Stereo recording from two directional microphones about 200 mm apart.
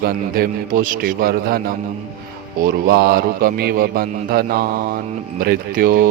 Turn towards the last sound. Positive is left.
turn(degrees=-45)  # may be behind; listen again after turning